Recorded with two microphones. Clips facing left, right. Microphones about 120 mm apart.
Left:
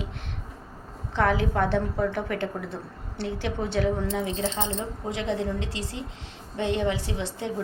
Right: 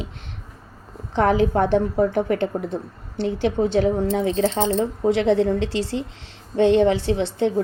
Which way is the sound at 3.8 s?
50° right (ahead or behind).